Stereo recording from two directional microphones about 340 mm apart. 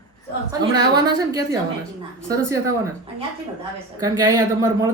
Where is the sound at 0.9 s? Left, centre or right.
Centre.